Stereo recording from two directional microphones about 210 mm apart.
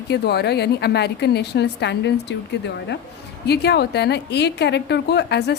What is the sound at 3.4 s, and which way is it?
A woman's voice, 50° left (ahead or behind).